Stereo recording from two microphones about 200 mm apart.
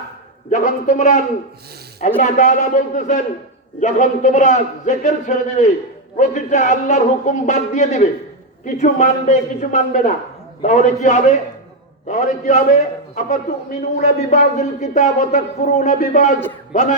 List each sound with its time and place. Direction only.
0.5 s speech: 35° left (ahead or behind)